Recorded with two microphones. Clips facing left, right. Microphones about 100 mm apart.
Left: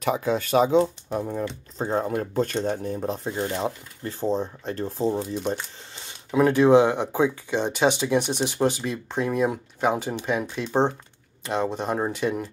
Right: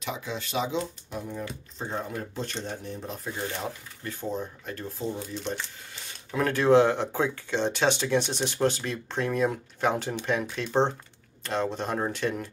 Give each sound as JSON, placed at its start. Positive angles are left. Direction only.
{"t": 0.0, "sound": "speech", "side_deg": 45}
{"t": 3.3, "sound": "speech", "side_deg": 25}
{"t": 6.0, "sound": "speech", "side_deg": 15}